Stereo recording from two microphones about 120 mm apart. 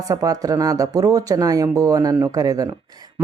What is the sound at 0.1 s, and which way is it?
Speech, 30° right (ahead or behind).